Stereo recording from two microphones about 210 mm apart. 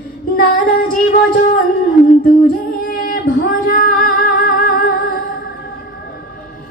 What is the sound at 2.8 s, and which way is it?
Singing, 40° left (ahead or behind).